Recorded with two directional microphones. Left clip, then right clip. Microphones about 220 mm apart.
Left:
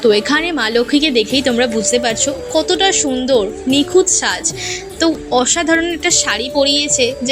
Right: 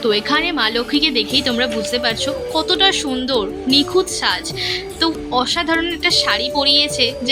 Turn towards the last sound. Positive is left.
turn(degrees=5)  # may be behind; listen again after turning